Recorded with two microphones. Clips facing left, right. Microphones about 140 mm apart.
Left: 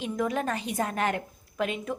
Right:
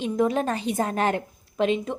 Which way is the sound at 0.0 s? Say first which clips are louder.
Right 5 dB; 30° right (ahead or behind).